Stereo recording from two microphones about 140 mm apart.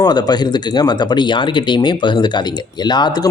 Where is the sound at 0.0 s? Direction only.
30° left (ahead or behind).